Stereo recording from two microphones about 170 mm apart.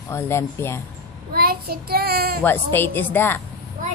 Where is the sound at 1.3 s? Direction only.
65° right (ahead or behind).